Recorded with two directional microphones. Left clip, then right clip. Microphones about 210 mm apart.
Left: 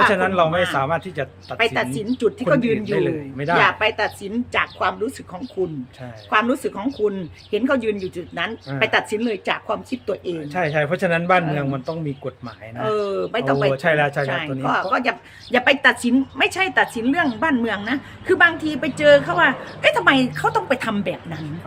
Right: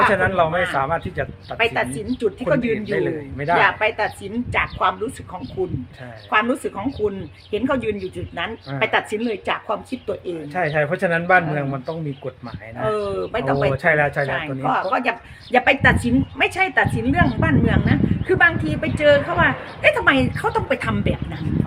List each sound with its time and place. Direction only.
0.1 s a man's voice: 5° right (ahead or behind)
0.5 s a woman's voice: 10° left (ahead or behind)
0.8 s a man's voice: 5° right (ahead or behind)
1.5 s a woman's voice: 15° left (ahead or behind)
2.9 s a man's voice: centre (ahead or behind)
3.5 s a woman's voice: 10° left (ahead or behind)
6.3 s a woman's voice: 10° left (ahead or behind)
10.5 s a man's voice: 5° right (ahead or behind)
12.8 s a woman's voice: 10° left (ahead or behind)
13.7 s a man's voice: 5° right (ahead or behind)
14.3 s a woman's voice: 15° left (ahead or behind)